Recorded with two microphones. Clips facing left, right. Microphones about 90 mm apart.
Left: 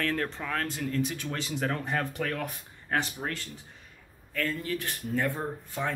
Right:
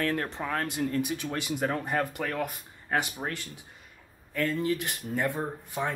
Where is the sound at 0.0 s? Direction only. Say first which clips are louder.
Right 1 dB; 15° right (ahead or behind).